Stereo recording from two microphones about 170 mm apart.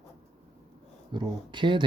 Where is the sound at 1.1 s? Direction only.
30° right (ahead or behind).